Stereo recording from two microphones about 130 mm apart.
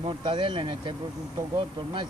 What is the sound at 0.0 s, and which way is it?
Speech, 40° right (ahead or behind).